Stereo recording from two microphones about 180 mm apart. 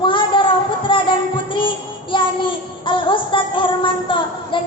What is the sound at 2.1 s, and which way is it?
Music, 30° left (ahead or behind).